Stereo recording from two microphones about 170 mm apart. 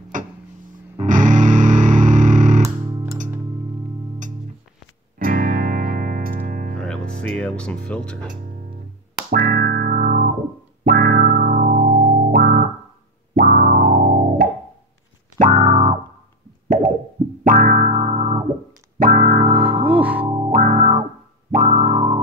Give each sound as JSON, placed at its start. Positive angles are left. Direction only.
{"t": 1.0, "sound": "music", "side_deg": -50}
{"t": 5.2, "sound": "music", "side_deg": -55}
{"t": 6.8, "sound": "music", "side_deg": 5}
{"t": 9.3, "sound": "music", "side_deg": -55}
{"t": 16.6, "sound": "plop", "side_deg": -55}
{"t": 17.5, "sound": "music", "side_deg": -50}
{"t": 18.9, "sound": "music", "side_deg": -50}
{"t": 19.6, "sound": "music", "side_deg": -10}
{"t": 20.2, "sound": "music", "side_deg": -25}
{"t": 20.5, "sound": "music", "side_deg": -45}
{"t": 21.5, "sound": "music", "side_deg": -55}
{"t": 21.8, "sound": "music", "side_deg": -40}